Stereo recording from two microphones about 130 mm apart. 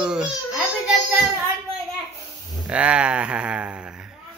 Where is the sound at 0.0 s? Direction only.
5° right (ahead or behind).